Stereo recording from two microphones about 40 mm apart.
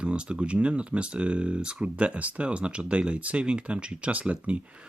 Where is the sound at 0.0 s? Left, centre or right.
Right.